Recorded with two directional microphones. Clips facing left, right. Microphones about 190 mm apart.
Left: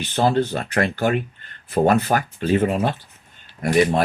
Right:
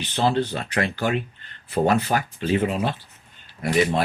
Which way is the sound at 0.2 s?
45° left (ahead or behind).